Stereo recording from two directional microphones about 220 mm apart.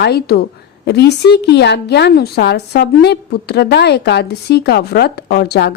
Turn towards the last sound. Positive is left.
turn(degrees=50)  # may be behind; listen again after turning